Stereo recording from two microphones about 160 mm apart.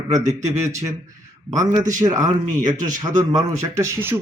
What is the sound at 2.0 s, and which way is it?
Speech, 20° right (ahead or behind).